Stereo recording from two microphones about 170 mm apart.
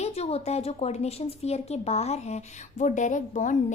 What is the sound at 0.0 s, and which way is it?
Speech, 35° left (ahead or behind).